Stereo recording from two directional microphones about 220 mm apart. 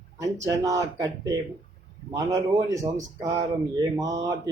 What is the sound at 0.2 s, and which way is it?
A man's voice, 15° right (ahead or behind).